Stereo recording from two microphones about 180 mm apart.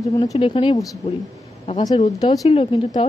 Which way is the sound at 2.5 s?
30° left (ahead or behind).